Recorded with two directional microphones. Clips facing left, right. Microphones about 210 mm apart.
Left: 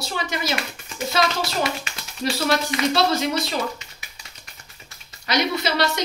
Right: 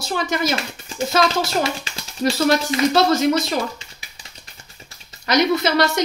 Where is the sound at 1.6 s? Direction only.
30° right (ahead or behind).